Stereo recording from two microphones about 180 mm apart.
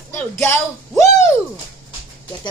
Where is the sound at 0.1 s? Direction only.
10° left (ahead or behind).